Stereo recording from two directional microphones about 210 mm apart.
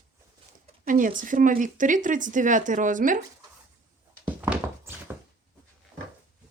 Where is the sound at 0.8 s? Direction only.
40° right (ahead or behind).